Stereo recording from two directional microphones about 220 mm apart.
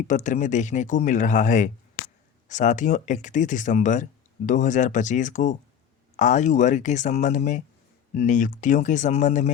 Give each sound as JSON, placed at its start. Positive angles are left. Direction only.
{"t": 0.0, "sound": "speech", "side_deg": 35}